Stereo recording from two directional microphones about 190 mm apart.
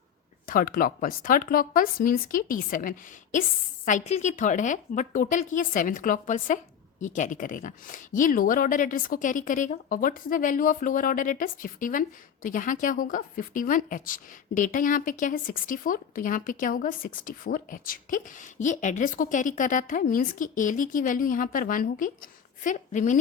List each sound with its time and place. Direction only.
0.4 s a woman's voice: 45° left (ahead or behind)